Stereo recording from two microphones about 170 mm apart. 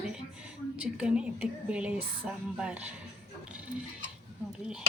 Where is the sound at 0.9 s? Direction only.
5° right (ahead or behind).